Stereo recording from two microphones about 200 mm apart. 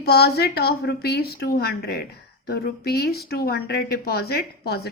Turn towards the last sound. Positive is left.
turn(degrees=50)  # may be behind; listen again after turning